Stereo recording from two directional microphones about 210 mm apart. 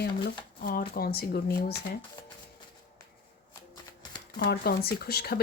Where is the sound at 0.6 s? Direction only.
45° left (ahead or behind).